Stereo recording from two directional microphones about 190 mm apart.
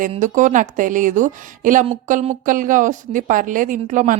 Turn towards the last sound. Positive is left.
turn(degrees=-40)  # may be behind; listen again after turning